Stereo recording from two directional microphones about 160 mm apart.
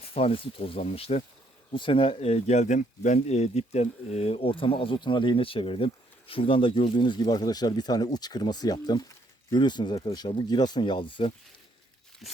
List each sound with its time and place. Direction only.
0.1 s speech: 35° left (ahead or behind)